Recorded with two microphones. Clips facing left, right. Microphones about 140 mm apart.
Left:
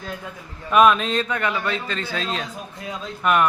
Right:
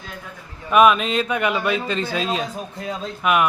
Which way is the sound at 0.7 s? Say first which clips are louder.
Right 1 dB; 5° right (ahead or behind).